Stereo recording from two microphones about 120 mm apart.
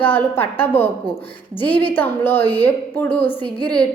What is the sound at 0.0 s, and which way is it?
Speech, 15° left (ahead or behind).